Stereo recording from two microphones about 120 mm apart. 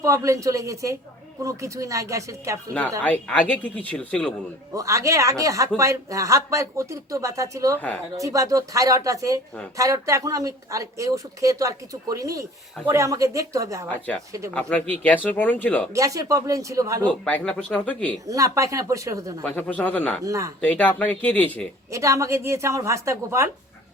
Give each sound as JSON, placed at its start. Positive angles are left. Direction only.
{"t": 0.0, "sound": "speech", "side_deg": -25}
{"t": 3.0, "sound": "speech", "side_deg": 10}
{"t": 4.7, "sound": "speech", "side_deg": -25}
{"t": 14.5, "sound": "speech", "side_deg": 10}
{"t": 15.9, "sound": "speech", "side_deg": -30}
{"t": 17.0, "sound": "speech", "side_deg": 10}
{"t": 18.3, "sound": "speech", "side_deg": -25}
{"t": 19.6, "sound": "speech", "side_deg": 10}
{"t": 20.2, "sound": "speech", "side_deg": -25}
{"t": 20.6, "sound": "speech", "side_deg": 15}
{"t": 21.8, "sound": "speech", "side_deg": -25}